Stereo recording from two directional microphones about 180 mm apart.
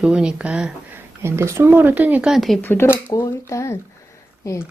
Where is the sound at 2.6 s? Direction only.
10° left (ahead or behind).